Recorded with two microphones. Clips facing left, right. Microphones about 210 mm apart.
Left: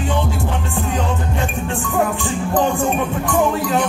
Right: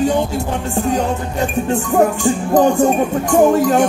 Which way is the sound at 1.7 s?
40° right (ahead or behind).